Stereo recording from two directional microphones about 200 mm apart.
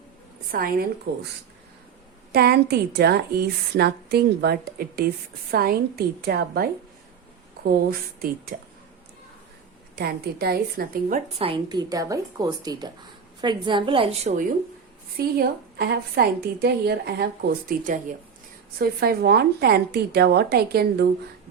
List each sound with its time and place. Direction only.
0.5 s a woman's voice: 45° right (ahead or behind)
2.3 s a woman's voice: 55° right (ahead or behind)
10.0 s a woman's voice: 50° right (ahead or behind)
11.3 s speech: 25° right (ahead or behind)
15.2 s a woman's voice: 50° right (ahead or behind)